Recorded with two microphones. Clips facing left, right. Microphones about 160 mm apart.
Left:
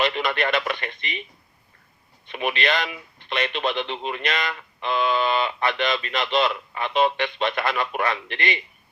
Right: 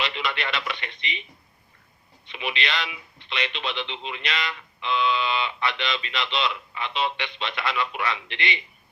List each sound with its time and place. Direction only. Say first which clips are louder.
0.0 s speech: left 6 dB; 45° left (ahead or behind)
2.2 s speech: left 6 dB; 50° left (ahead or behind)